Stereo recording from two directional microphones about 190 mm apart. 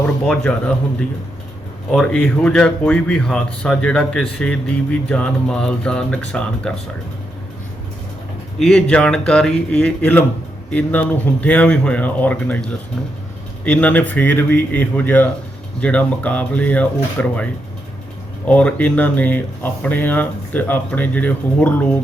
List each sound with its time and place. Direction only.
0.0 s speech: 5° left (ahead or behind)
8.5 s speech: 5° left (ahead or behind)